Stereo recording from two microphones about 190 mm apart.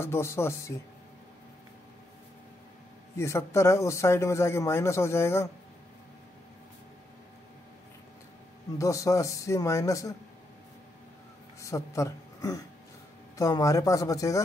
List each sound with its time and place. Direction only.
0.0 s speech: 15° left (ahead or behind)
3.2 s speech: 15° left (ahead or behind)
8.7 s speech: 15° left (ahead or behind)
11.6 s speech: 15° left (ahead or behind)